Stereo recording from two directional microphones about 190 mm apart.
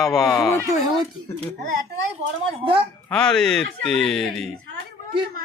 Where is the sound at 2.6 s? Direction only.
30° right (ahead or behind).